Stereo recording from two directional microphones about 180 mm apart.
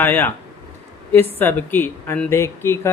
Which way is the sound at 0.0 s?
10° left (ahead or behind).